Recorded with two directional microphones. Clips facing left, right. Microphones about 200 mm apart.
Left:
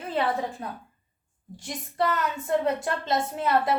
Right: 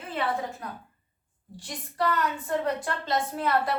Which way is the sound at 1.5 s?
20° left (ahead or behind).